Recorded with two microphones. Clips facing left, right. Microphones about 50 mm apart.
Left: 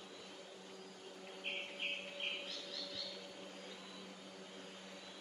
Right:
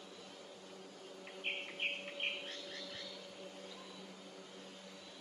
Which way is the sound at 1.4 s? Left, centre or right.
Right.